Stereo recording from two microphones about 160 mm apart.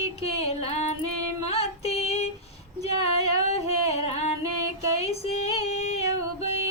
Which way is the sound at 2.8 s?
40° left (ahead or behind).